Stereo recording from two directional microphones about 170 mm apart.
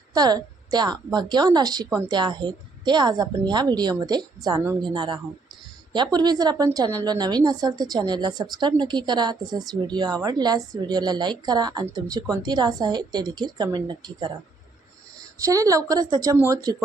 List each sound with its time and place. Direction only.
0.1 s a woman's voice: 25° right (ahead or behind)
15.4 s a woman's voice: 20° right (ahead or behind)